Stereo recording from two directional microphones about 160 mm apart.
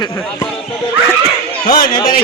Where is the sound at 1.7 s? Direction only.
60° left (ahead or behind).